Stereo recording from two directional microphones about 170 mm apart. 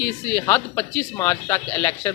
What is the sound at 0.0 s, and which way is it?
Speech, 15° left (ahead or behind).